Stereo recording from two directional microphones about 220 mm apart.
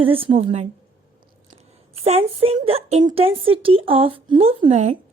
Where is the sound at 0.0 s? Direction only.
25° right (ahead or behind).